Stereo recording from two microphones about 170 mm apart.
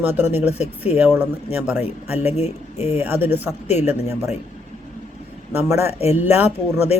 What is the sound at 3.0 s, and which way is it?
Speech, 10° right (ahead or behind).